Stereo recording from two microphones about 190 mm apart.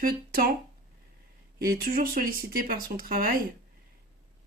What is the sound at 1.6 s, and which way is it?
Speech, 50° right (ahead or behind).